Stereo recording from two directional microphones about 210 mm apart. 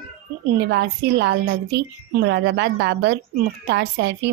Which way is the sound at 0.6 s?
55° right (ahead or behind).